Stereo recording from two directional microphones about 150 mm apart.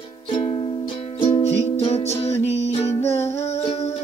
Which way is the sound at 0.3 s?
35° left (ahead or behind).